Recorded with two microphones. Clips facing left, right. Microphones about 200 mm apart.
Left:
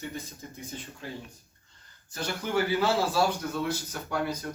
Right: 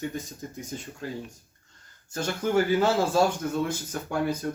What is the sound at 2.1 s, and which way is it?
Speech, 45° right (ahead or behind).